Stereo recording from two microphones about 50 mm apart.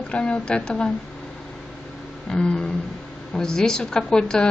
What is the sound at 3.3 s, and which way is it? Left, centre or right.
Speech, centre.